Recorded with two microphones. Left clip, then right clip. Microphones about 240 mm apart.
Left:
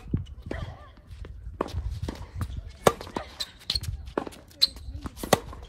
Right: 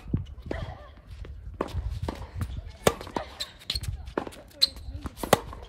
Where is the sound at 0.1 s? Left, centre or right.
Right.